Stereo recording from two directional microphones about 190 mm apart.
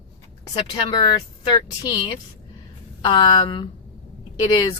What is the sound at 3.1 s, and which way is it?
A woman's voice, 25° left (ahead or behind).